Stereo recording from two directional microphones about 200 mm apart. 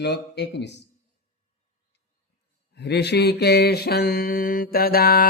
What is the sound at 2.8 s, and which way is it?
Mantra, 55° left (ahead or behind).